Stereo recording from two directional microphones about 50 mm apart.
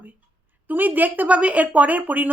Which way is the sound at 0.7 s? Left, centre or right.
Right.